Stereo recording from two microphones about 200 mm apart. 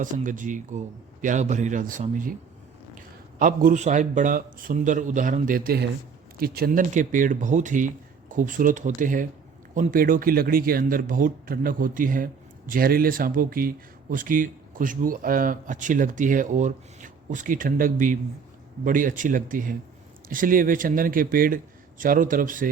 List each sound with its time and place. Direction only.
0.0 s a man's voice: 40° right (ahead or behind)